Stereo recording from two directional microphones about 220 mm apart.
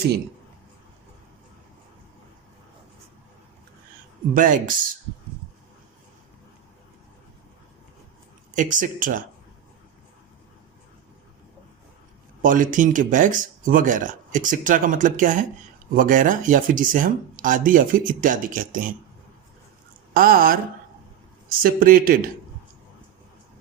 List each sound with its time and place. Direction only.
4.4 s speech: 35° right (ahead or behind)
8.5 s speech: 35° right (ahead or behind)
12.4 s speech: 35° right (ahead or behind)
20.1 s speech: 40° right (ahead or behind)
21.6 s speech: 40° right (ahead or behind)